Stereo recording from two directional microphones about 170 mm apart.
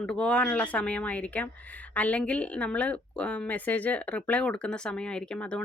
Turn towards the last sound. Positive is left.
turn(degrees=5)  # may be behind; listen again after turning